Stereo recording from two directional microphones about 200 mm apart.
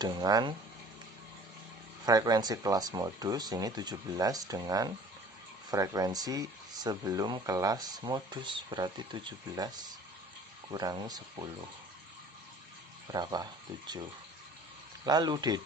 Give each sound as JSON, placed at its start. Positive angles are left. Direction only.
{"t": 0.0, "sound": "speech", "side_deg": -20}
{"t": 2.0, "sound": "speech", "side_deg": -20}
{"t": 10.7, "sound": "speech", "side_deg": -20}
{"t": 13.1, "sound": "speech", "side_deg": -20}
{"t": 15.0, "sound": "speech", "side_deg": -20}